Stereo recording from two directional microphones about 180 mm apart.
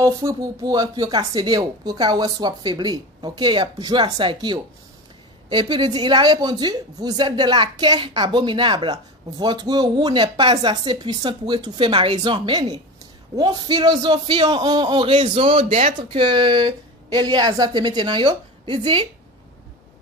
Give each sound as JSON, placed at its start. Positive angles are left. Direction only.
{"t": 0.0, "sound": "a woman's voice", "side_deg": -20}